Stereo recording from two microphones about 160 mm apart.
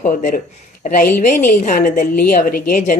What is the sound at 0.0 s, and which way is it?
A woman's voice, 55° left (ahead or behind).